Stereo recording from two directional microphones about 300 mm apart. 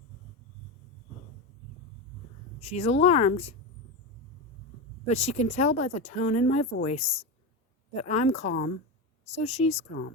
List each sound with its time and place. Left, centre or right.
2.6 s speech: left
5.0 s speech: left